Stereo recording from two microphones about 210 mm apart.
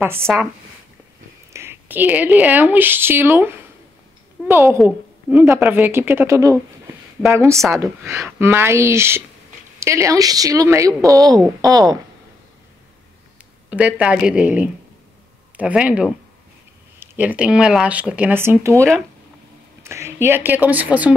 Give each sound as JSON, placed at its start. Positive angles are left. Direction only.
{"t": 0.0, "sound": "a woman's voice", "side_deg": -10}
{"t": 1.5, "sound": "a woman's voice", "side_deg": -10}
{"t": 13.7, "sound": "a woman's voice", "side_deg": -5}